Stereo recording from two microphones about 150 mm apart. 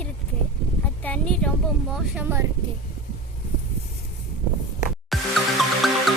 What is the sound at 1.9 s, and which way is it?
Speech, 10° right (ahead or behind).